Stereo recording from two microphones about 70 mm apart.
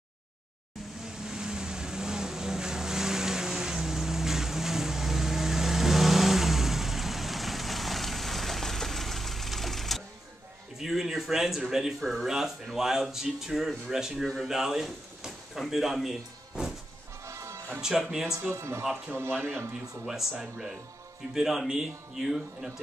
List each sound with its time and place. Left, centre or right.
1.0 s vehicle: centre
10.8 s speech: centre
17.2 s music: right
17.7 s speech: centre
18.5 s speech: right
20.1 s speech: centre